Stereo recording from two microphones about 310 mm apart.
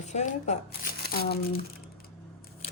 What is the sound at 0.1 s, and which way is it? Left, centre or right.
Speech, left.